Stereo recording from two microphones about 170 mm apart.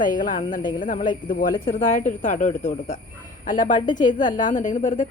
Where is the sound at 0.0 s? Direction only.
50° left (ahead or behind).